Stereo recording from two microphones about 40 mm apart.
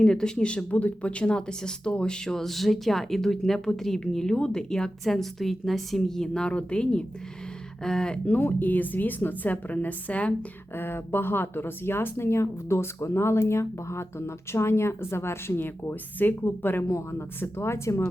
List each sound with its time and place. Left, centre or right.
0.0 s speech: left
8.4 s a woman's voice: left
10.8 s speech: left